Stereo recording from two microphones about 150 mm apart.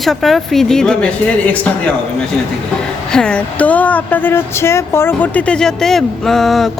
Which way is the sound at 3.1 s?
5° left (ahead or behind).